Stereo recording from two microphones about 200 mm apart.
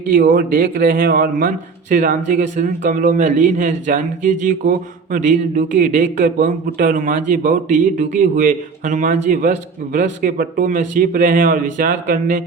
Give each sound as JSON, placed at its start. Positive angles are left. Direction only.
{"t": 0.1, "sound": "a man's voice", "side_deg": -45}